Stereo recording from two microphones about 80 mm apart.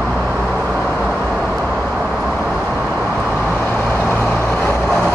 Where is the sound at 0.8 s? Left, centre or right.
Centre.